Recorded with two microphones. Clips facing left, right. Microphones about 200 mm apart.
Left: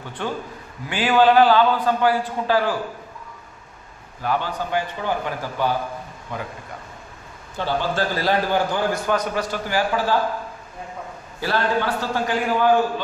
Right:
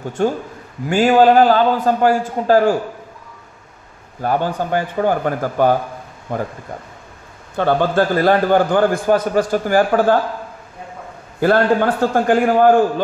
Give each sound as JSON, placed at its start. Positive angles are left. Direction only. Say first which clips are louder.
{"t": 0.0, "sound": "a man's voice", "louder": "right 9 dB", "side_deg": -45}
{"t": 4.2, "sound": "a man's voice", "louder": "right 5 dB", "side_deg": -45}
{"t": 7.5, "sound": "a man's voice", "louder": "right 8 dB", "side_deg": -55}
{"t": 11.3, "sound": "a man's voice", "louder": "right 8 dB", "side_deg": -50}